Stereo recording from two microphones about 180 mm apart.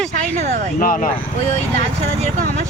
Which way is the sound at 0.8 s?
50° left (ahead or behind).